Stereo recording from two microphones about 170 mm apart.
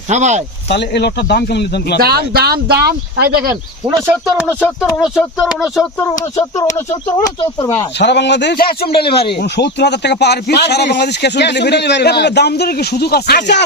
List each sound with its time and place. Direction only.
0.1 s speech: 45° right (ahead or behind)
0.7 s speech: 85° left
2.0 s speech: 65° right (ahead or behind)
3.5 s speech: 15° right (ahead or behind)
4.1 s speech: 5° right (ahead or behind)
6.7 s speech: 20° left (ahead or behind)
7.9 s speech: 90° left; by 8.9 s 65° left (ahead or behind)
9.0 s speech: 30° left (ahead or behind)
9.4 s speech: 80° left